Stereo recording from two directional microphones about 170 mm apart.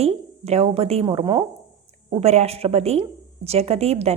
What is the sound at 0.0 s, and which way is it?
A woman's voice, 40° right (ahead or behind).